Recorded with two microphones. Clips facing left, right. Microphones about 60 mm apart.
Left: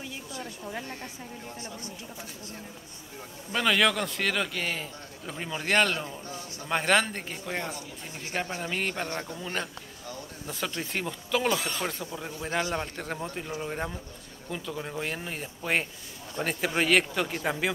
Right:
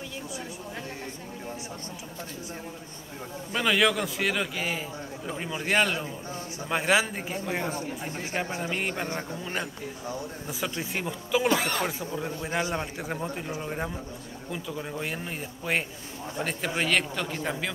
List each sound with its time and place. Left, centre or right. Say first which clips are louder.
3.5 s a man's voice: even; centre; by 10.5 s right
10.8 s speech: right 1 dB; centre
11.5 s speech: right 4 dB; right
12.4 s speech: left 2 dB; centre
13.6 s a man's voice: right 1 dB; centre